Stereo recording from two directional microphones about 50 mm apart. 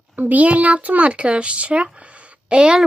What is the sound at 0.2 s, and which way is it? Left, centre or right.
Speech, right.